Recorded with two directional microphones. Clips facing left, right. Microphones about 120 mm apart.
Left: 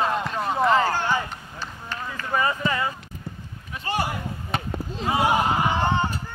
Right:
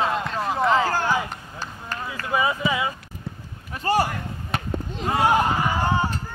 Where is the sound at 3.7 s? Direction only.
40° right (ahead or behind).